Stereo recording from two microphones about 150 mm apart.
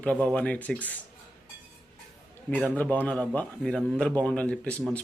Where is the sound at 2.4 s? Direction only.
10° left (ahead or behind).